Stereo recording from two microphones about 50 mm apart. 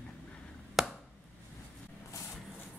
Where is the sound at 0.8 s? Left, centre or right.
Centre.